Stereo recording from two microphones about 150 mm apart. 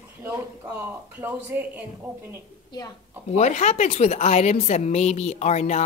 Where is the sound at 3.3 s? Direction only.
50° left (ahead or behind).